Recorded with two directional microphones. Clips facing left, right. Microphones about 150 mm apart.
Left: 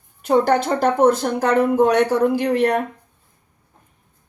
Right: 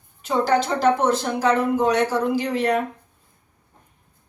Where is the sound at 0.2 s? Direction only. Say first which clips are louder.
Left 4 dB; 55° left (ahead or behind).